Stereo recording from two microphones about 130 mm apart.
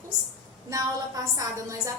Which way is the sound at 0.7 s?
25° right (ahead or behind).